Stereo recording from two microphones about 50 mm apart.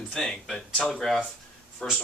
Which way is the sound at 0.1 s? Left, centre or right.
Centre.